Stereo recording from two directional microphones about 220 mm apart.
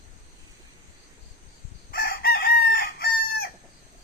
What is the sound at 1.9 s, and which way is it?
Chicken, 45° left (ahead or behind).